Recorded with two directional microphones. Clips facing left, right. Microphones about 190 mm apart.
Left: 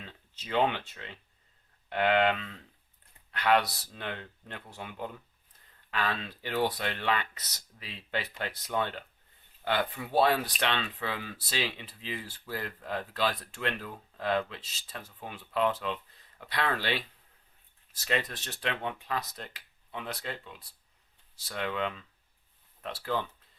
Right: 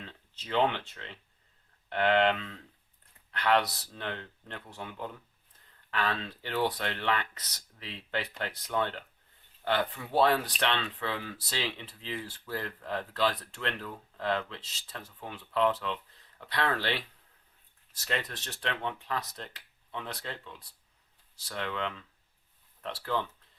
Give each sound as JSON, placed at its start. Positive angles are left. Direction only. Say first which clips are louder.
{"t": 0.4, "sound": "speech", "louder": "even", "side_deg": 10}
{"t": 3.3, "sound": "speech", "louder": "left 1 dB", "side_deg": 10}